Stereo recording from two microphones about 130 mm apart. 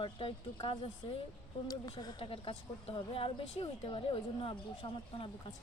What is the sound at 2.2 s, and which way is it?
Speech, 45° left (ahead or behind).